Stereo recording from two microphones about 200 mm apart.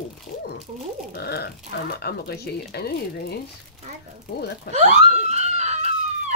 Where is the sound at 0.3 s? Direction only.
45° left (ahead or behind).